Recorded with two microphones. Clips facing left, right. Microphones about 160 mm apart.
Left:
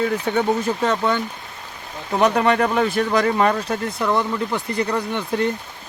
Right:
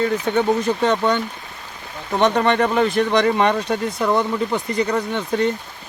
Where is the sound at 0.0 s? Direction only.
5° left (ahead or behind).